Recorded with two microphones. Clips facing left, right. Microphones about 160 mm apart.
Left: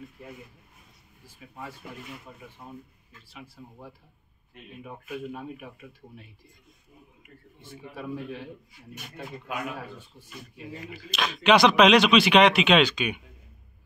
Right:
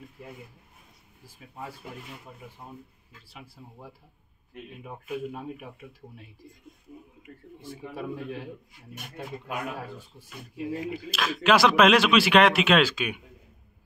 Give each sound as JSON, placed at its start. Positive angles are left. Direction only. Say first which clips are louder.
{"t": 7.6, "sound": "speech", "louder": "right 2 dB", "side_deg": -35}
{"t": 11.1, "sound": "speech", "louder": "left 2 dB", "side_deg": -5}